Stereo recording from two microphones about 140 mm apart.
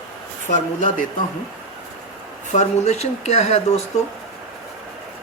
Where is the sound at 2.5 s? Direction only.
55° left (ahead or behind).